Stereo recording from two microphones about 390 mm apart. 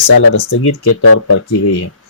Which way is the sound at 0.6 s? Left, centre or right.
Left.